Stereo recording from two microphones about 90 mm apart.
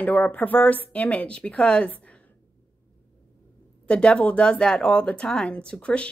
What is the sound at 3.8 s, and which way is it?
Speech, 10° left (ahead or behind).